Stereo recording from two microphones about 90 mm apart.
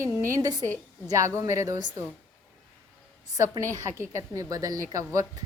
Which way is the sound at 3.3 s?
40° right (ahead or behind).